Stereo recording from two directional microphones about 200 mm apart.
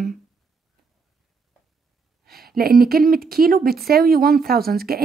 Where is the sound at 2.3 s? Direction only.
50° right (ahead or behind).